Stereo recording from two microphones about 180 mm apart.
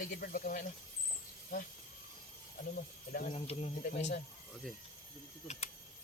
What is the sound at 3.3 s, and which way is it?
Speech, 35° left (ahead or behind).